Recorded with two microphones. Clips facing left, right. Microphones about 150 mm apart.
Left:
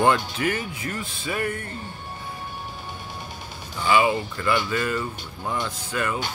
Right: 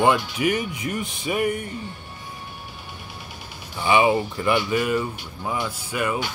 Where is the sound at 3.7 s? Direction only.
20° right (ahead or behind).